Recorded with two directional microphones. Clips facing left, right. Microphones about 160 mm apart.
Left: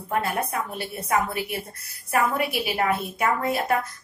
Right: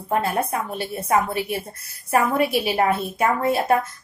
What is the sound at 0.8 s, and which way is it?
Speech, 30° right (ahead or behind).